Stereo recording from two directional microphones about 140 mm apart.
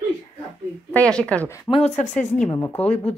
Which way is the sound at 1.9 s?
60° left (ahead or behind).